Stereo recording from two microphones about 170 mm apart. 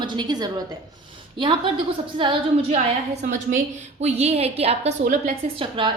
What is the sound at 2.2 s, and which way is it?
Speech, 30° right (ahead or behind).